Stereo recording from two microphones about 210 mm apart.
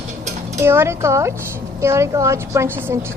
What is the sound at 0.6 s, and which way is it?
A woman's voice, 10° right (ahead or behind).